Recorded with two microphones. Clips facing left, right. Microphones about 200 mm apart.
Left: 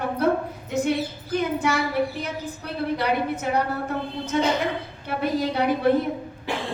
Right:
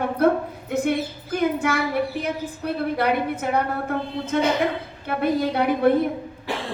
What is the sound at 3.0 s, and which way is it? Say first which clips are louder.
A woman's voice: right 3 dB; 55° right (ahead or behind).